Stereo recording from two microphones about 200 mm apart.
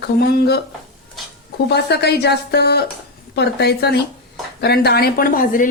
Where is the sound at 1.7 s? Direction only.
55° left (ahead or behind).